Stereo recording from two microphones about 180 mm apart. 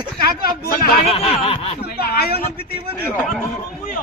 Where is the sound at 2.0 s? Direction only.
60° left (ahead or behind).